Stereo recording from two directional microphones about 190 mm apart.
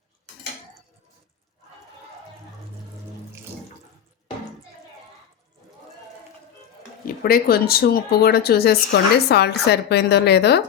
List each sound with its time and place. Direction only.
7.0 s speech: 50° left (ahead or behind)